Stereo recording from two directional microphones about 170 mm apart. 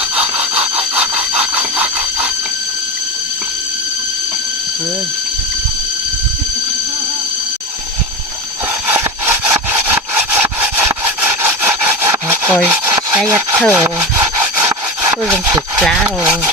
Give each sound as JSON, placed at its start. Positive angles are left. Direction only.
{"t": 0.2, "sound": "sawing", "side_deg": -10}
{"t": 8.9, "sound": "wood", "side_deg": -10}
{"t": 15.3, "sound": "speech", "side_deg": -15}
{"t": 15.8, "sound": "speech", "side_deg": 5}
{"t": 16.0, "sound": "speech", "side_deg": -10}